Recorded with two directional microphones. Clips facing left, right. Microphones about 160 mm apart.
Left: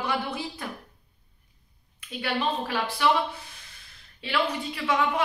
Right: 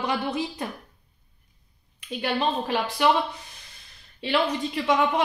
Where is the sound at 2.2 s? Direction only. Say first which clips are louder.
Right 2 dB; 20° right (ahead or behind).